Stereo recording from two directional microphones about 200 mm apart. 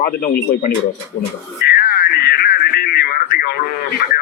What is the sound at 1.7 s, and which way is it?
Radio, 50° left (ahead or behind).